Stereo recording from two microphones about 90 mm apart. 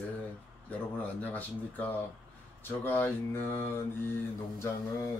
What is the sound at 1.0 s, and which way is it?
Speech, 20° left (ahead or behind).